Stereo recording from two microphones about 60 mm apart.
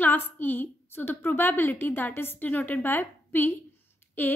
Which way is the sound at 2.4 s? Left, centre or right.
Left.